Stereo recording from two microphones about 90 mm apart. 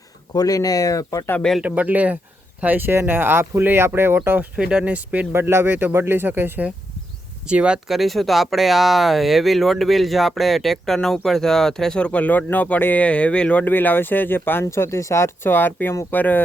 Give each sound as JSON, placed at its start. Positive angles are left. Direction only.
{"t": 0.3, "sound": "speech", "side_deg": 40}
{"t": 1.4, "sound": "speech", "side_deg": 5}
{"t": 1.6, "sound": "speech", "side_deg": -15}
{"t": 4.5, "sound": "speech", "side_deg": -10}
{"t": 7.4, "sound": "speech", "side_deg": -10}
{"t": 7.9, "sound": "speech", "side_deg": 0}